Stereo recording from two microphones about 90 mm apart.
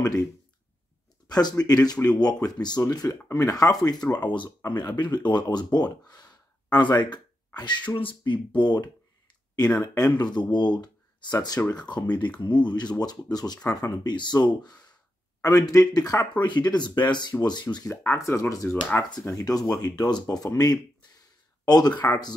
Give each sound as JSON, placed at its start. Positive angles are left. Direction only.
{"t": 0.0, "sound": "speech", "side_deg": 45}
{"t": 7.9, "sound": "speech", "side_deg": 70}
{"t": 8.2, "sound": "speech", "side_deg": 60}
{"t": 9.9, "sound": "speech", "side_deg": 50}
{"t": 14.1, "sound": "speech", "side_deg": 55}
{"t": 15.4, "sound": "speech", "side_deg": 40}
{"t": 18.1, "sound": "speech", "side_deg": 35}